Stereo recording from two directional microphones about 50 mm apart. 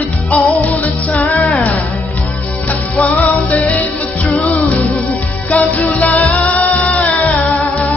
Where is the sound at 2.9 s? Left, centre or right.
Left.